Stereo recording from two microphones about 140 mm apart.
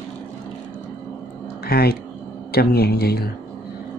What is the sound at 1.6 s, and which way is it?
A man's voice, 90° left.